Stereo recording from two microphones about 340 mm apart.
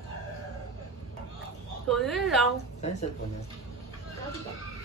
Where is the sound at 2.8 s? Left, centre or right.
Centre.